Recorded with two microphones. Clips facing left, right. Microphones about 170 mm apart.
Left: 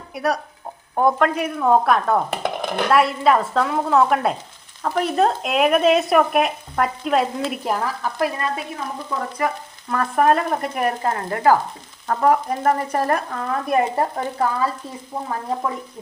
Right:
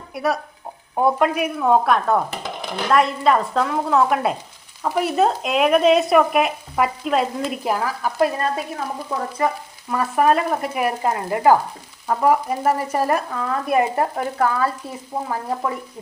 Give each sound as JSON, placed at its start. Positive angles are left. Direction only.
{"t": 0.1, "sound": "speech", "side_deg": 0}
{"t": 2.4, "sound": "a sound", "side_deg": 55}
{"t": 2.9, "sound": "speech", "side_deg": 5}
{"t": 8.2, "sound": "stir", "side_deg": -35}
{"t": 9.4, "sound": "frying", "side_deg": -25}
{"t": 9.9, "sound": "stir", "side_deg": -5}